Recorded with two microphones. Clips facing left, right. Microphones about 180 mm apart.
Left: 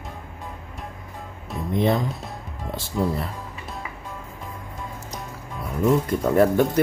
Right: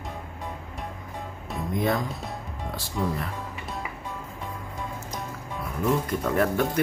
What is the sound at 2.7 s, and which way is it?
Speech, 25° left (ahead or behind).